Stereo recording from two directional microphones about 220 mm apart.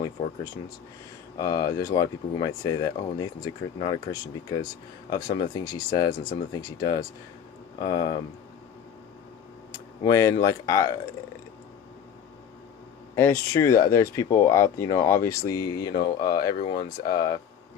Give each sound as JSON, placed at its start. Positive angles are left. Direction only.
{"t": 1.4, "sound": "speech", "side_deg": 15}
{"t": 9.7, "sound": "speech", "side_deg": 15}
{"t": 13.1, "sound": "speech", "side_deg": 15}